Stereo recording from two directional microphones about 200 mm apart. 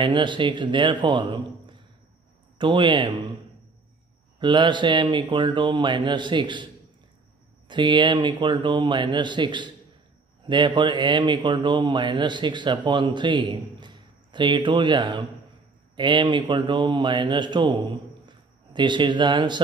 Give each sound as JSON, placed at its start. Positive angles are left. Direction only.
{"t": 0.0, "sound": "speech", "side_deg": -25}
{"t": 4.4, "sound": "speech", "side_deg": -25}
{"t": 13.7, "sound": "a sound", "side_deg": -25}
{"t": 16.0, "sound": "a man's voice", "side_deg": -25}